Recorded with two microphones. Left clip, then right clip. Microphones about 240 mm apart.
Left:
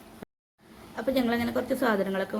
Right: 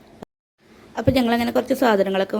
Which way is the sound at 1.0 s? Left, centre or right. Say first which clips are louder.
Right 7 dB; right.